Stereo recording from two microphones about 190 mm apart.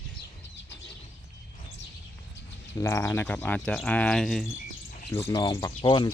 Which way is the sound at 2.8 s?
15° left (ahead or behind).